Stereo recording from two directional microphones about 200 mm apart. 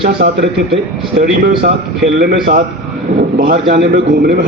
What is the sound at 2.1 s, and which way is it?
A man's voice, 45° right (ahead or behind).